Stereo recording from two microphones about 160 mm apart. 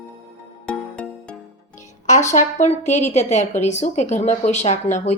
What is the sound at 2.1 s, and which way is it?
A woman's voice, 50° left (ahead or behind).